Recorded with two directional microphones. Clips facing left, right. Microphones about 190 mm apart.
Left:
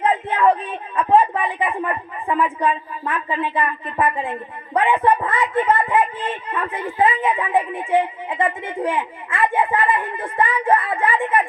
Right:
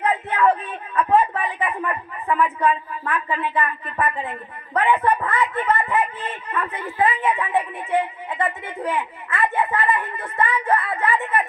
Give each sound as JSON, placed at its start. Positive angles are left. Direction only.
{"t": 0.0, "sound": "speech", "side_deg": 25}